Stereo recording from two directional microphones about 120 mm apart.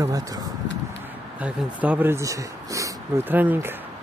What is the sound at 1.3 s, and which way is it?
Speech, 10° right (ahead or behind).